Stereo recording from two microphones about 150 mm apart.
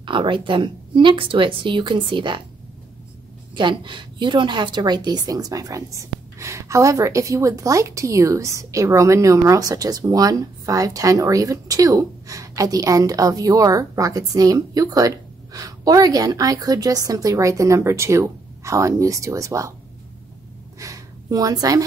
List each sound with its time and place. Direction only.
0.0 s a woman's voice: 35° right (ahead or behind)
3.5 s a woman's voice: 30° right (ahead or behind)
20.8 s a woman's voice: 25° right (ahead or behind)